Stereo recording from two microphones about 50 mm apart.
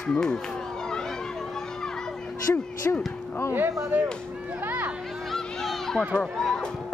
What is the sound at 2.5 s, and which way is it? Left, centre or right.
Speech, left.